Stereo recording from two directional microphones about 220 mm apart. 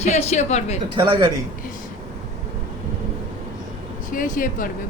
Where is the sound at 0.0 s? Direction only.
30° left (ahead or behind).